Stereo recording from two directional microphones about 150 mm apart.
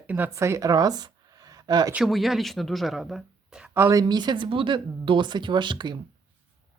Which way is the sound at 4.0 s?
30° right (ahead or behind).